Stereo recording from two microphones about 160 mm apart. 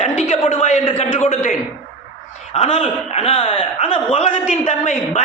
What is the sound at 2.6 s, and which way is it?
A man's voice, 40° left (ahead or behind).